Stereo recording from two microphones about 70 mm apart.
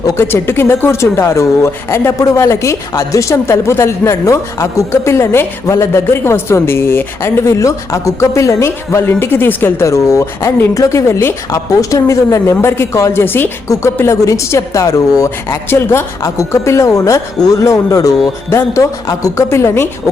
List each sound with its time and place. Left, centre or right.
0.2 s speech: left
9.8 s speech: left
13.2 s speech: left
13.7 s speech: left
15.7 s speech: left
19.5 s speech: left